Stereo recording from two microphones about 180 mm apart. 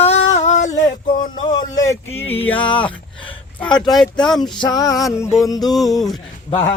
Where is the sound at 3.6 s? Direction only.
5° left (ahead or behind).